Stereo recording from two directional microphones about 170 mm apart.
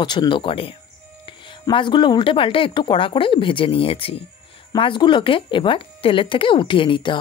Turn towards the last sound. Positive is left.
turn(degrees=30)  # may be behind; listen again after turning